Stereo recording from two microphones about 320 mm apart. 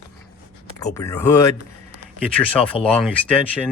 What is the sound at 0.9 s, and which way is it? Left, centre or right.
Speech, centre.